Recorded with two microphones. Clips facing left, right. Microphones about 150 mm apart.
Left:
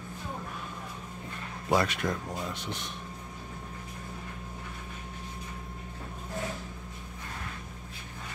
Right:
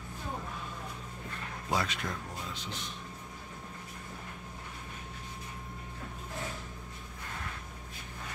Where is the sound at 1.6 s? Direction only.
60° left (ahead or behind).